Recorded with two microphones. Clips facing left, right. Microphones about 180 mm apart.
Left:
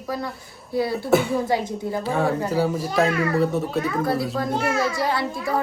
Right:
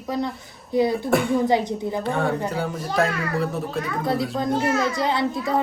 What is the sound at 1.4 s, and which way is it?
Speech, 20° right (ahead or behind).